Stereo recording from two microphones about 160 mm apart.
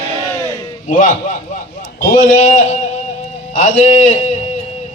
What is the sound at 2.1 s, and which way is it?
A man's voice, 50° left (ahead or behind).